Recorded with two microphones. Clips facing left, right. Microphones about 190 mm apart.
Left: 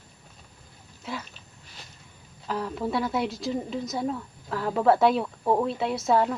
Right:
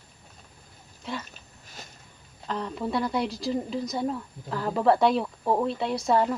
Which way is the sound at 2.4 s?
5° left (ahead or behind).